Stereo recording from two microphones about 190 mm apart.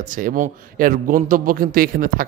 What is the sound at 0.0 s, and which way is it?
A man's voice, 45° right (ahead or behind).